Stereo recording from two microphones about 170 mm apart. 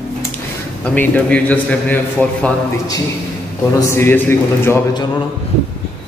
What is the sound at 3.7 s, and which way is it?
Speech, 15° left (ahead or behind).